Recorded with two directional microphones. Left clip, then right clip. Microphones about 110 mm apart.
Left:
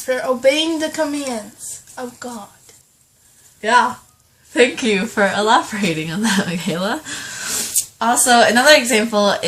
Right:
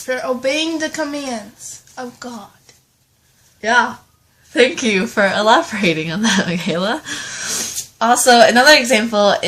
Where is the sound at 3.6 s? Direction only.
25° right (ahead or behind).